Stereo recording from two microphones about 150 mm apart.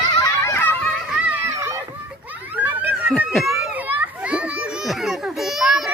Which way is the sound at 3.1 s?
Centre (ahead or behind).